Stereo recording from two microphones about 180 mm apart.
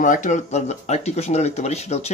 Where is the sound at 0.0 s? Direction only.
45° left (ahead or behind).